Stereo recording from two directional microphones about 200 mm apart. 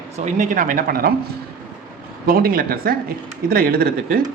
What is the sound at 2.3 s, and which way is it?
Speech, 45° right (ahead or behind).